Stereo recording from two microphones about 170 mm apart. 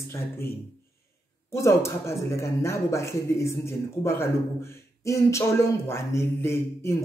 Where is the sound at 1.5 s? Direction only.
15° left (ahead or behind).